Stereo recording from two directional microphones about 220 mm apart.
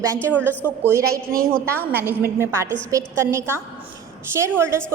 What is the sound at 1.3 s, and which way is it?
Speech, 45° right (ahead or behind).